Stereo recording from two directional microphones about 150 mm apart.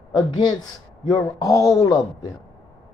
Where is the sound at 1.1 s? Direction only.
25° left (ahead or behind).